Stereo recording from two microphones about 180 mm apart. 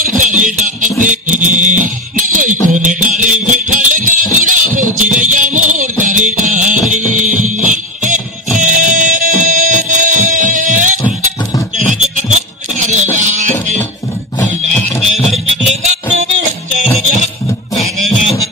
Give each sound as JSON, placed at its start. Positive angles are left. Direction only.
{"t": 0.0, "sound": "music", "side_deg": -45}
{"t": 11.9, "sound": "a sound", "side_deg": -45}
{"t": 13.2, "sound": "music", "side_deg": -40}
{"t": 15.1, "sound": "music", "side_deg": 0}
{"t": 15.7, "sound": "music", "side_deg": -40}